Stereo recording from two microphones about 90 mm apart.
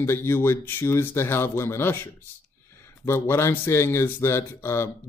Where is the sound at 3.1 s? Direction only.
25° left (ahead or behind).